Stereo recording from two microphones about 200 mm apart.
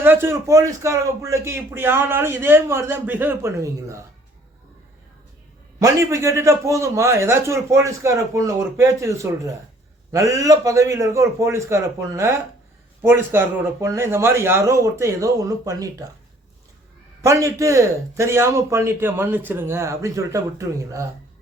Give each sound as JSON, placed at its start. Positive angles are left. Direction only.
{"t": 0.0, "sound": "a man's voice", "side_deg": -10}
{"t": 5.8, "sound": "a man's voice", "side_deg": -15}
{"t": 17.2, "sound": "a man's voice", "side_deg": -15}